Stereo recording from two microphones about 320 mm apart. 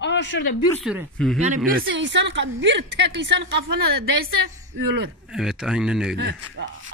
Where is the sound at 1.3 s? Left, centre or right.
Right.